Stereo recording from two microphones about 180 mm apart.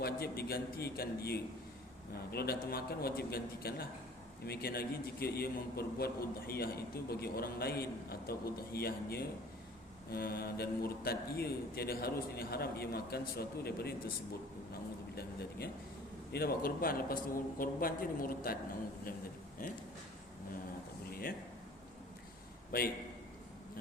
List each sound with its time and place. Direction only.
0.0 s a man's voice: 60° left (ahead or behind)
15.1 s a man's voice: 60° left (ahead or behind)
19.6 s a man's voice: 50° left (ahead or behind)
21.1 s a sound: 55° left (ahead or behind)
22.7 s a man's voice: 60° left (ahead or behind)